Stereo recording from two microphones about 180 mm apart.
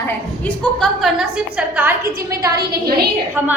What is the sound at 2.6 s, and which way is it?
Speech, 60° right (ahead or behind).